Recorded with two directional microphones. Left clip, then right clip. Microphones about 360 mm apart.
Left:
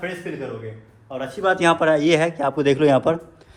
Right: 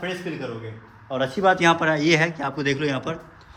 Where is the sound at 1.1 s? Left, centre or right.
Right.